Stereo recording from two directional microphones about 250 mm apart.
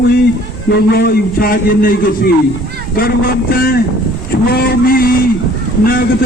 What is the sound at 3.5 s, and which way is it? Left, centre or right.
A man's voice, left.